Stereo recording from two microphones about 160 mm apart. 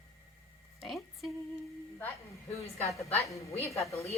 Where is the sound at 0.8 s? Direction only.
Centre (ahead or behind).